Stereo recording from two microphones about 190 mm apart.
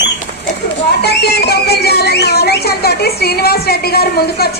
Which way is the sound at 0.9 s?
60° left (ahead or behind).